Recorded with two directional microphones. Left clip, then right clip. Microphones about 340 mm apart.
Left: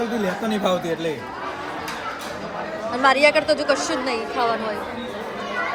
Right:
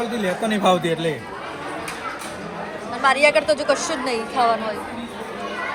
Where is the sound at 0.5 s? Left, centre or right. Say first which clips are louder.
Right 5 dB; right.